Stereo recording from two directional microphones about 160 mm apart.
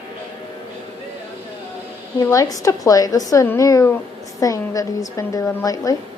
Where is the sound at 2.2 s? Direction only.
20° left (ahead or behind).